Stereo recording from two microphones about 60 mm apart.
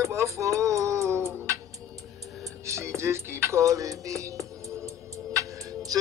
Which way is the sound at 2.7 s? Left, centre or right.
Right.